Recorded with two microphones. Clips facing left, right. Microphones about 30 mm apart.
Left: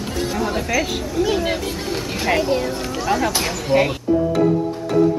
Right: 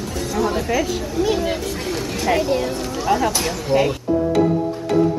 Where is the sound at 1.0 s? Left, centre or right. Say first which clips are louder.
Even; centre.